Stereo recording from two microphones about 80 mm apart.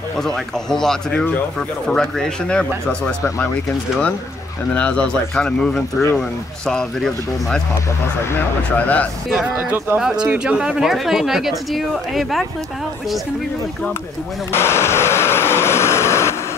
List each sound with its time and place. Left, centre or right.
0.2 s speech: centre
4.7 s speech: centre
8.4 s speech: left
9.9 s speech: centre
14.5 s vehicle: left